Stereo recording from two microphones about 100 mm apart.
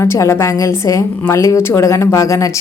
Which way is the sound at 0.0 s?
25° left (ahead or behind).